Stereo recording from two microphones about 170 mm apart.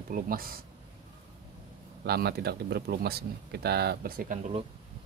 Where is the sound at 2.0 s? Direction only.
70° right (ahead or behind).